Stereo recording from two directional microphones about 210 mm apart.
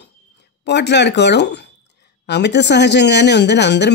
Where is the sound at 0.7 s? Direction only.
55° left (ahead or behind).